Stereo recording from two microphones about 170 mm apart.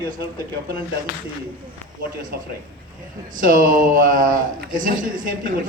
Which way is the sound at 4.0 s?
55° right (ahead or behind).